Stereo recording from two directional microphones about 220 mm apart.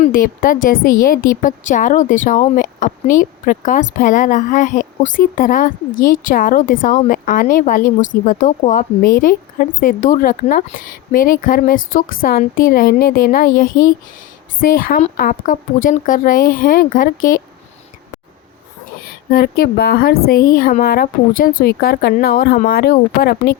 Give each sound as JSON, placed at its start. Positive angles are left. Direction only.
{"t": 0.0, "sound": "a woman's voice", "side_deg": 40}
{"t": 14.6, "sound": "a woman's voice", "side_deg": 40}
{"t": 19.3, "sound": "speech", "side_deg": 45}